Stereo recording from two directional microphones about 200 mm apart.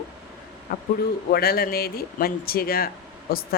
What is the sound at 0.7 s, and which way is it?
A woman's voice, 45° left (ahead or behind).